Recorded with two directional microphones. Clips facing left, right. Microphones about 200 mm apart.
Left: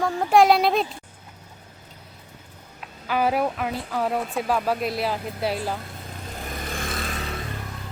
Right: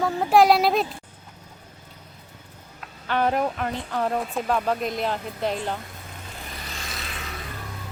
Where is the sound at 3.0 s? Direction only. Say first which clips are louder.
Left 1 dB; 5° left (ahead or behind).